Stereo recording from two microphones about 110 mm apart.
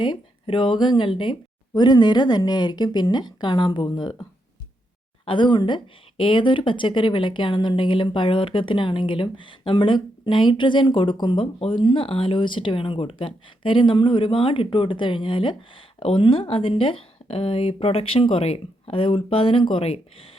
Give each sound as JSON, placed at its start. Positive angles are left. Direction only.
{"t": 0.0, "sound": "speech", "side_deg": 50}
{"t": 12.0, "sound": "speech", "side_deg": 55}